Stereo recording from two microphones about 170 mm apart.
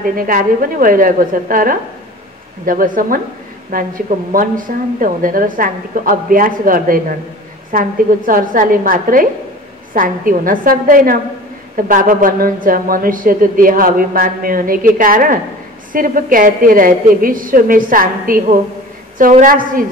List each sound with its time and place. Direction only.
0.0 s a woman's voice: 55° right (ahead or behind)